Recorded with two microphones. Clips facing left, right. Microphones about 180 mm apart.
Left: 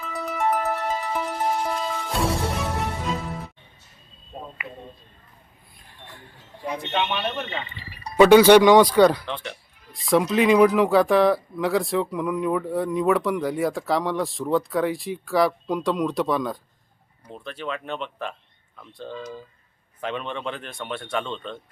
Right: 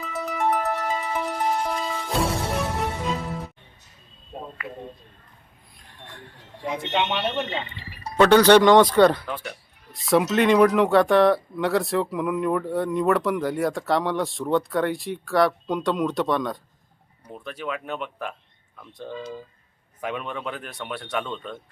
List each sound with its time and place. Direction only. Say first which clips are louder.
0.0 s music: even; centre (ahead or behind)
4.6 s speech: right 3 dB; centre (ahead or behind)
6.1 s speech: right 2 dB; centre (ahead or behind)
6.9 s speech: right 2 dB; 20° right (ahead or behind)
8.1 s speech: left 2 dB; 10° left (ahead or behind)
17.2 s speech: even; 10° right (ahead or behind)